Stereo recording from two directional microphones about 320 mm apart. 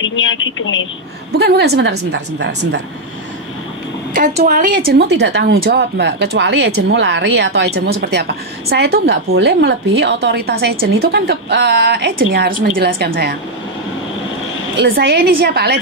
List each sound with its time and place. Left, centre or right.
0.0 s a woman's voice: left
1.4 s a woman's voice: right
4.1 s a woman's voice: right
14.8 s a woman's voice: right